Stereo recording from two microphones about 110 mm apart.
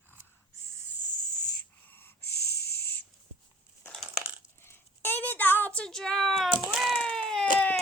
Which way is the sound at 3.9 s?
Centre (ahead or behind).